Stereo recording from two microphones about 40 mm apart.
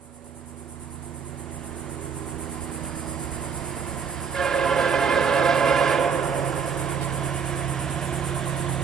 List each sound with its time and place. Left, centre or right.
2.7 s vehicle: centre
3.5 s train: centre
7.1 s vehicle: centre